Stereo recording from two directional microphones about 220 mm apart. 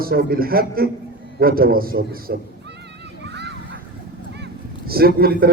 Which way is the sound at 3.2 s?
50° right (ahead or behind).